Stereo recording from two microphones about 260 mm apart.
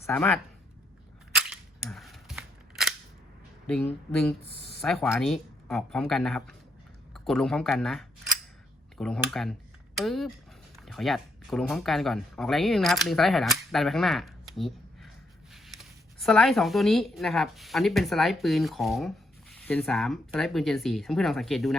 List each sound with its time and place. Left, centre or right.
0.0 s speech: centre
1.3 s cap gun: centre
4.8 s speech: centre